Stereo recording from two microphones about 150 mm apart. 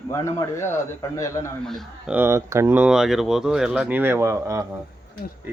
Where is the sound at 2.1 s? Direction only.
15° right (ahead or behind).